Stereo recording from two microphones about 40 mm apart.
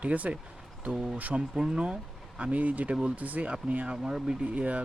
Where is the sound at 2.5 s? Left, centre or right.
Right.